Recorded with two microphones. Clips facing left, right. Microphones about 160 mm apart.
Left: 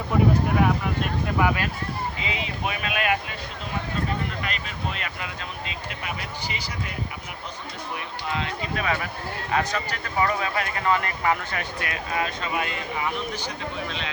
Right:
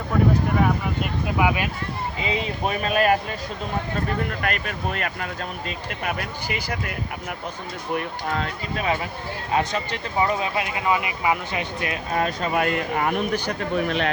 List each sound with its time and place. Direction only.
1.4 s speech: 10° right (ahead or behind)
2.2 s speech: 35° right (ahead or behind)
4.3 s speech: 55° right (ahead or behind)
7.9 s speech: 50° right (ahead or behind)
8.7 s speech: 25° right (ahead or behind)
12.1 s speech: 40° right (ahead or behind); by 14.1 s 60° right (ahead or behind)